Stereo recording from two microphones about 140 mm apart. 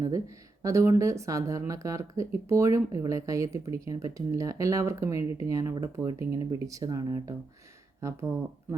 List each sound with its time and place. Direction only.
0.0 s speech: 25° right (ahead or behind)